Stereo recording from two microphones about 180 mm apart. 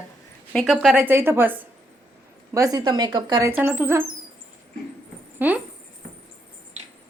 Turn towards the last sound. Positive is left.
turn(degrees=-10)  # may be behind; listen again after turning